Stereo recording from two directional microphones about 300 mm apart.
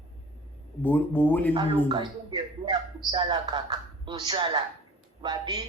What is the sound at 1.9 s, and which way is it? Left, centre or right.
Speech, centre.